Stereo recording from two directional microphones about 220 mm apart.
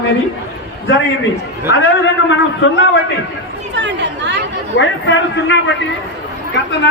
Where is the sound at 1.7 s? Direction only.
55° left (ahead or behind).